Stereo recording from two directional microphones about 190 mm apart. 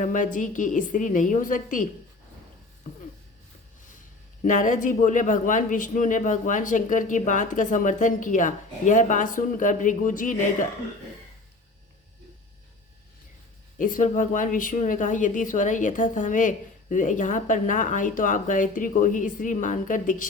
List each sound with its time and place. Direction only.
0.0 s speech: 45° left (ahead or behind)
4.4 s speech: 40° left (ahead or behind)
13.7 s speech: 45° left (ahead or behind)